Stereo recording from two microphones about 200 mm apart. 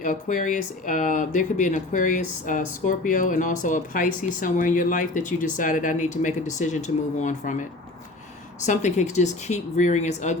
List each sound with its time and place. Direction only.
0.0 s speech: 40° left (ahead or behind)
8.6 s speech: 35° left (ahead or behind)